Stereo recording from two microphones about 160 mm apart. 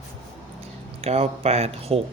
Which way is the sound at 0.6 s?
40° right (ahead or behind).